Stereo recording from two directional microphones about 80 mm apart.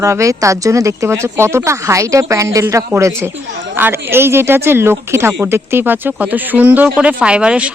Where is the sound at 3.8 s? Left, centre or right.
Right.